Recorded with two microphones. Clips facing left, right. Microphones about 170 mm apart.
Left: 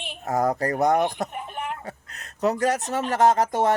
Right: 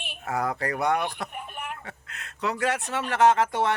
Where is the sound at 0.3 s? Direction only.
40° left (ahead or behind).